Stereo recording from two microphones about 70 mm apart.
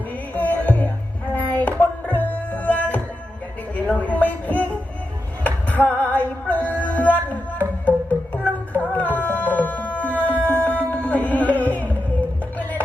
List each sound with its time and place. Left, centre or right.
0.3 s music: left
3.8 s a sound: left
5.4 s female singing: left
6.8 s music: left
9.6 s a sound: left
10.5 s music: left